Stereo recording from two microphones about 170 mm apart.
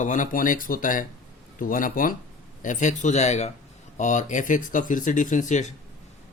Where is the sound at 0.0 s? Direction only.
50° left (ahead or behind).